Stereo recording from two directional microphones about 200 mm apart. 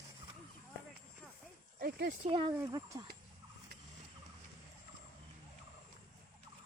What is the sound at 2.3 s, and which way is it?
Speech, 25° right (ahead or behind).